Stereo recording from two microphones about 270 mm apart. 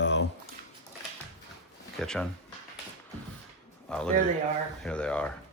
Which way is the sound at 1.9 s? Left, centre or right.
Centre.